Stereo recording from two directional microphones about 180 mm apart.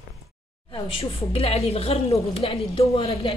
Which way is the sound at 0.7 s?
30° left (ahead or behind).